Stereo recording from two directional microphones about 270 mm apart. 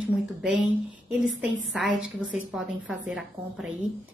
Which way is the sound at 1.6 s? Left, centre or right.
Centre.